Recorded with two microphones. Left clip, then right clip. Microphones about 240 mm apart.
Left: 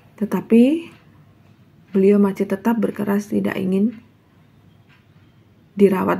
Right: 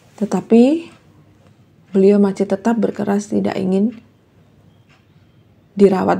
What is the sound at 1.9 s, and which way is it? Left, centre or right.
Speech, centre.